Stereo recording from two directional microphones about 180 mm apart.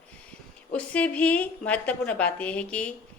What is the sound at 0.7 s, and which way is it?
A woman's voice, 10° left (ahead or behind).